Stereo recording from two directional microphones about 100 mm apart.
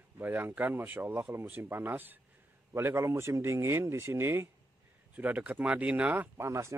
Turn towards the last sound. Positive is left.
turn(degrees=-30)  # may be behind; listen again after turning